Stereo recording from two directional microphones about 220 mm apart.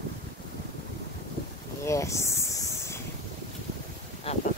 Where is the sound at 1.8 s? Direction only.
15° left (ahead or behind).